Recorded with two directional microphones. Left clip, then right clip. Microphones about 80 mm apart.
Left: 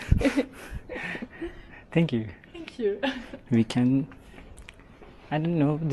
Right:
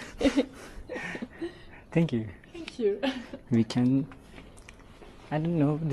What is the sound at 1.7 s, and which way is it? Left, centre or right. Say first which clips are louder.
Speech: left 2 dB; centre.